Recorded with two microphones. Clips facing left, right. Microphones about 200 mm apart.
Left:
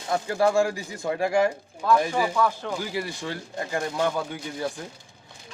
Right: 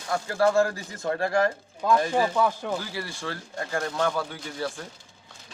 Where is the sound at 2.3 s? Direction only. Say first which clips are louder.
Even; 15° right (ahead or behind).